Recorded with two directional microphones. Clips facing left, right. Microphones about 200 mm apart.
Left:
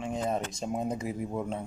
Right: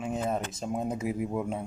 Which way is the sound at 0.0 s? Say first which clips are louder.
Even; 5° right (ahead or behind).